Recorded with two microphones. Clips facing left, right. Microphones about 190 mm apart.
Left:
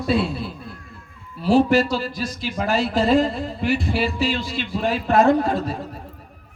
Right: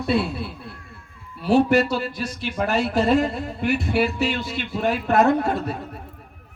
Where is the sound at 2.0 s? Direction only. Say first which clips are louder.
Left 1 dB; 60° right (ahead or behind).